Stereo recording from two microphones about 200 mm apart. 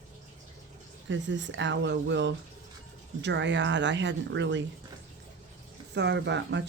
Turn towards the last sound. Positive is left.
turn(degrees=-60)  # may be behind; listen again after turning